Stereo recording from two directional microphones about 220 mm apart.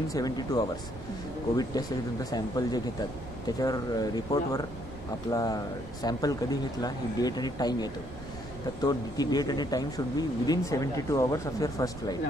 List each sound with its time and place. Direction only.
0.1 s speech: 15° left (ahead or behind)